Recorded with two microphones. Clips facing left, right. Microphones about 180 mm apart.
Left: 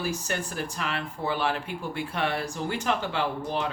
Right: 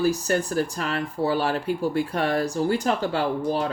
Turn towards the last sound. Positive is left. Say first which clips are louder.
# right 5 dB
turn(degrees=-40)  # may be behind; listen again after turning